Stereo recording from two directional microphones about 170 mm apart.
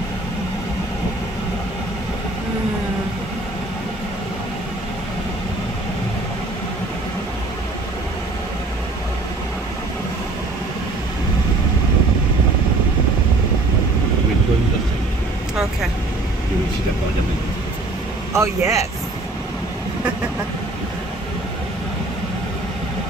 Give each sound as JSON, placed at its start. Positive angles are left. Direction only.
{"t": 18.3, "sound": "speech", "side_deg": -15}